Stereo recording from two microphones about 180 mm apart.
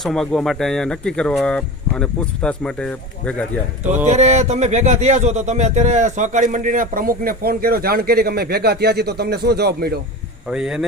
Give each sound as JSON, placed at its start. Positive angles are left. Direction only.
{"t": 0.0, "sound": "speech", "side_deg": 0}
{"t": 4.0, "sound": "speech", "side_deg": -40}
{"t": 10.5, "sound": "speech", "side_deg": -5}